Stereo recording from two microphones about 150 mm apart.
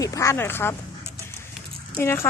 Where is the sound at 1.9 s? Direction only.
15° left (ahead or behind).